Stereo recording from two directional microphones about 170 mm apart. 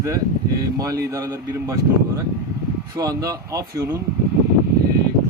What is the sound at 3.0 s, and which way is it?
Speech, 20° right (ahead or behind).